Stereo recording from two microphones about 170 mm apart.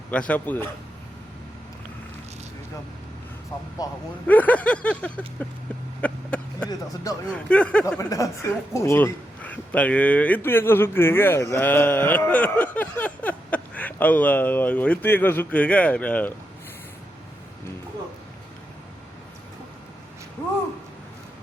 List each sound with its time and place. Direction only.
0.1 s a woman's voice: 10° left (ahead or behind)
3.8 s speech: 20° left (ahead or behind)
4.3 s a woman's voice: 10° left (ahead or behind)
6.0 s vehicle: 5° left (ahead or behind)
6.7 s speech: 20° left (ahead or behind)
7.3 s speech: 5° left (ahead or behind)
7.9 s a woman's voice: 20° left (ahead or behind)